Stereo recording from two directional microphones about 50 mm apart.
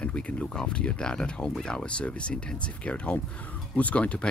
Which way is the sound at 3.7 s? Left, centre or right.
Left.